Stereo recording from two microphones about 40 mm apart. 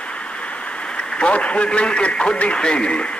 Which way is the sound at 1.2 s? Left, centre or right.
Left.